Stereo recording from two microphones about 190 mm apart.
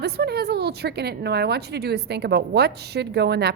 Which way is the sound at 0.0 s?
60° right (ahead or behind).